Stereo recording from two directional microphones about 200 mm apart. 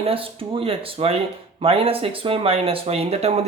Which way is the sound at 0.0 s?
25° right (ahead or behind).